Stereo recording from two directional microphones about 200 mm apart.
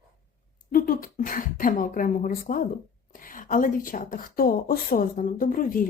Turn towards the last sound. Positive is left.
turn(degrees=45)  # may be behind; listen again after turning